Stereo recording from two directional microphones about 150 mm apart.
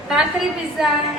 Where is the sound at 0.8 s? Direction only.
Centre (ahead or behind).